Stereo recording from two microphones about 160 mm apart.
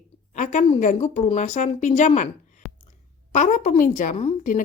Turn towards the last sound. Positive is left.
turn(degrees=50)  # may be behind; listen again after turning